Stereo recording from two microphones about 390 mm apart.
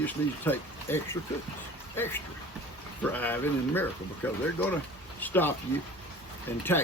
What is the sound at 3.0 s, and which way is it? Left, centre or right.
Speech, centre.